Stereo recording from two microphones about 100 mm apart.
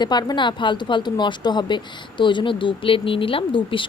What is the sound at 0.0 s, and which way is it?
Speech, 45° left (ahead or behind).